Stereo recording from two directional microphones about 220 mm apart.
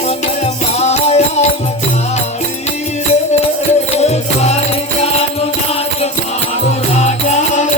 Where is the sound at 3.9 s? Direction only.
30° left (ahead or behind).